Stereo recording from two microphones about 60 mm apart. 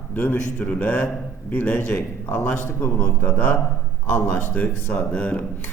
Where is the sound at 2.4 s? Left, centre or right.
Left.